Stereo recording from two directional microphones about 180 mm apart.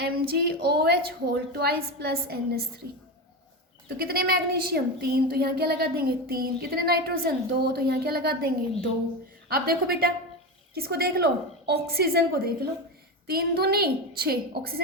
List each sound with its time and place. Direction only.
0.0 s a woman's voice: 60° right (ahead or behind)
3.8 s a woman's voice: 55° right (ahead or behind)
9.5 s a woman's voice: 55° right (ahead or behind)